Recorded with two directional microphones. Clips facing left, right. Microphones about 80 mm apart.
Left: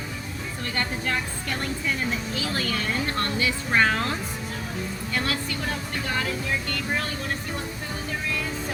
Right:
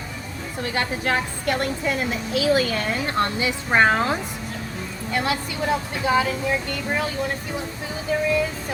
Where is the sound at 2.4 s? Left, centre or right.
Centre.